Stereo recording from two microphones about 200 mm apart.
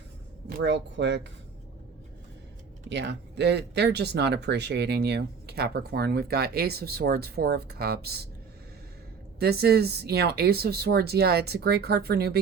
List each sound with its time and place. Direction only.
0.4 s speech: 55° right (ahead or behind)
2.9 s speech: 60° right (ahead or behind)
9.4 s speech: 50° right (ahead or behind)